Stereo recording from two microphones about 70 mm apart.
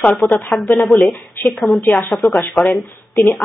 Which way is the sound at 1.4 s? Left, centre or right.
Left.